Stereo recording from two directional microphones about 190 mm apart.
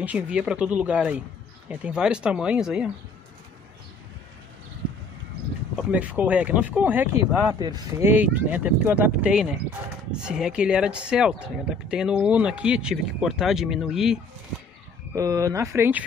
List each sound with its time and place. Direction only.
0.0 s speech: 5° right (ahead or behind)
5.8 s speech: 5° right (ahead or behind)
7.5 s speech: 20° right (ahead or behind); by 14.2 s 5° right (ahead or behind)
15.1 s speech: 15° right (ahead or behind)